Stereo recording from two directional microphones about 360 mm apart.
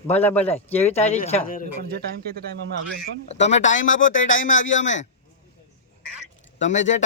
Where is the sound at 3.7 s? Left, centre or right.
Left.